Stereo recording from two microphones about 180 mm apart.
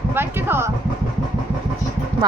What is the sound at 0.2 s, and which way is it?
Vehicle, 10° right (ahead or behind).